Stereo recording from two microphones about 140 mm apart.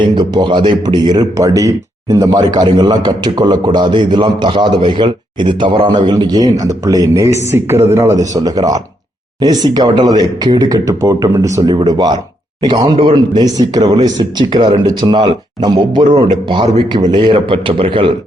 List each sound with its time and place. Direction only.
0.0 s speech: 35° right (ahead or behind)